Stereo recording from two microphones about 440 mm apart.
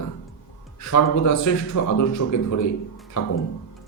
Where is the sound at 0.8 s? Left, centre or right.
Left.